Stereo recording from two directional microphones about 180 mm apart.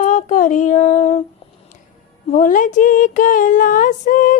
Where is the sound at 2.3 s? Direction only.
45° left (ahead or behind).